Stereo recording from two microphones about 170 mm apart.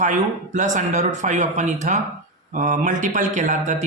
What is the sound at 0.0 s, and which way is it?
A man's voice, 45° right (ahead or behind).